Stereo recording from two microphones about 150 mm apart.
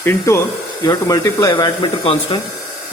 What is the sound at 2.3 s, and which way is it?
Speech, 35° left (ahead or behind).